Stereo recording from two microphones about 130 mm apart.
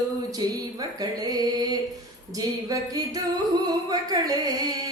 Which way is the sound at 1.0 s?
30° right (ahead or behind).